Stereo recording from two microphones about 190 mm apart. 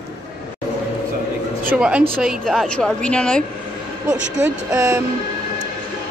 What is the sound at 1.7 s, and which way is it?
A woman's voice, 5° right (ahead or behind).